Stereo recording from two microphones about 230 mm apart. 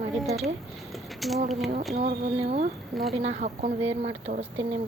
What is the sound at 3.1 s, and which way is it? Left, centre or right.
Speech, right.